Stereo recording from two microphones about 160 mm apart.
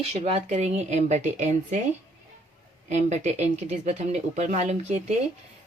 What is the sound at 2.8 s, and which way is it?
A woman's voice, 45° right (ahead or behind).